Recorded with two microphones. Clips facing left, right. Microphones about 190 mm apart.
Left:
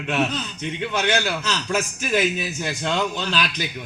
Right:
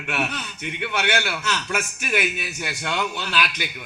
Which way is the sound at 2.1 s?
40° left (ahead or behind).